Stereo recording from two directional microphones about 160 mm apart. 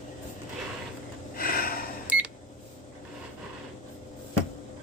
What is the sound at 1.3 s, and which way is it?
Gasp, 70° left (ahead or behind).